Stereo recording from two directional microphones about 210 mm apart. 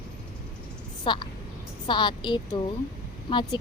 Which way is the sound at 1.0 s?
20° left (ahead or behind).